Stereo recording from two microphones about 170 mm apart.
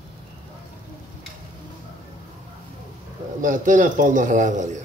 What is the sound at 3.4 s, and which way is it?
A man's voice, 50° right (ahead or behind).